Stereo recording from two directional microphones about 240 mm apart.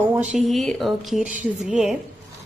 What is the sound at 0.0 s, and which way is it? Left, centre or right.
Speech, centre.